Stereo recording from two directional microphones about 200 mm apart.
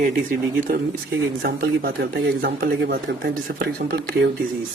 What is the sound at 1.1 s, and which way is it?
Speech, 55° right (ahead or behind).